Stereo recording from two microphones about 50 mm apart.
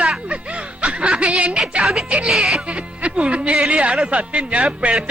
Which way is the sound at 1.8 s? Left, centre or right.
Centre.